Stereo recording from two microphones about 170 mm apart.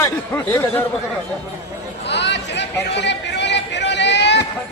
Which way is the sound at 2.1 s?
90° left.